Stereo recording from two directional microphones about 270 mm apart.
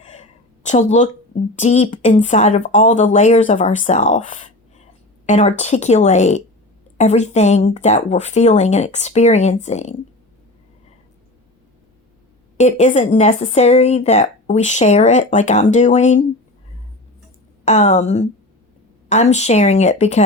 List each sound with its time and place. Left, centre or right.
0.0 s a sound: left
1.5 s speech: left
12.5 s speech: left
17.7 s speech: left